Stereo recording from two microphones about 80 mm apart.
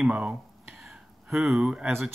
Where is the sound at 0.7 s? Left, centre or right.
Centre.